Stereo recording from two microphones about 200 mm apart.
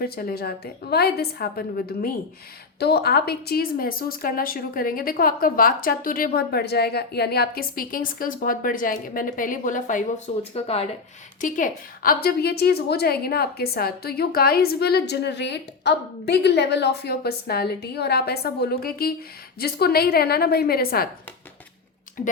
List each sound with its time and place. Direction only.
0.0 s a woman's voice: 50° left (ahead or behind); by 10.8 s 30° left (ahead or behind)
11.3 s a woman's voice: 40° left (ahead or behind)
22.2 s a woman's voice: 40° left (ahead or behind)